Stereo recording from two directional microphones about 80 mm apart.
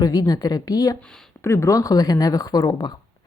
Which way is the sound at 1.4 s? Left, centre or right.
Left.